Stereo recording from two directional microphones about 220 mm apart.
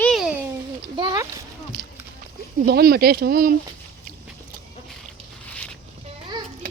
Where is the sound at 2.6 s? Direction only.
45° right (ahead or behind).